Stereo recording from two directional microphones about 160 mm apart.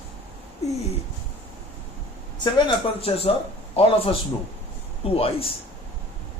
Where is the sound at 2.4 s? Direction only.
35° left (ahead or behind).